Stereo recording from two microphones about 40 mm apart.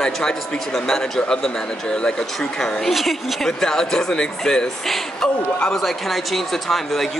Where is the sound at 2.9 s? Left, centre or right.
Centre.